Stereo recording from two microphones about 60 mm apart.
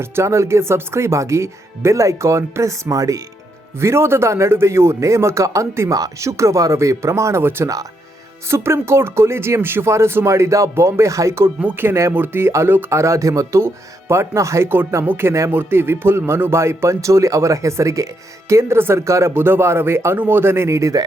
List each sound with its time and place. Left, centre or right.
0.0 s speech: right
3.8 s speech: right
7.4 s speech: right
11.6 s speech: right
13.6 s speech: right
15.0 s speech: right
19.3 s speech: right